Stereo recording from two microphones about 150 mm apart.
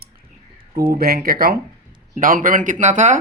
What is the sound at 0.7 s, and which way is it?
Speech, 90° right.